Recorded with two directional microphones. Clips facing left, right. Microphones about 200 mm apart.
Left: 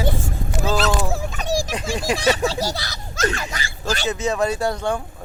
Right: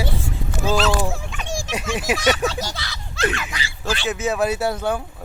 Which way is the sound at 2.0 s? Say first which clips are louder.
Left 1 dB; 30° left (ahead or behind).